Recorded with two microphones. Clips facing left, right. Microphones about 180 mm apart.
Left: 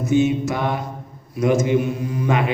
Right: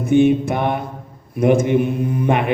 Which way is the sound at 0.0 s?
55° right (ahead or behind).